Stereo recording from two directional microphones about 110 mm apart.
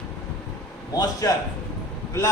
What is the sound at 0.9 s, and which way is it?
Speech, 35° left (ahead or behind).